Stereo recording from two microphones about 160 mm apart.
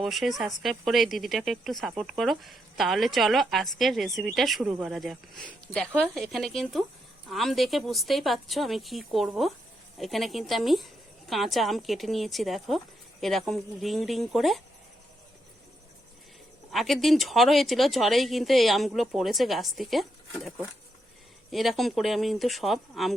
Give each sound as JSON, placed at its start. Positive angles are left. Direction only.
{"t": 0.0, "sound": "speech", "side_deg": 0}
{"t": 16.7, "sound": "speech", "side_deg": 0}
{"t": 21.5, "sound": "speech", "side_deg": 0}